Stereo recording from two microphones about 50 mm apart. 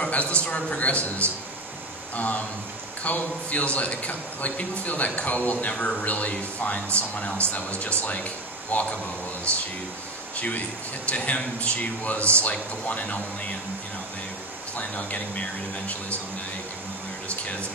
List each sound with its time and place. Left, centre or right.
0.0 s a man's voice: left
10.3 s a man's voice: left
14.8 s a man's voice: left
17.3 s speech: left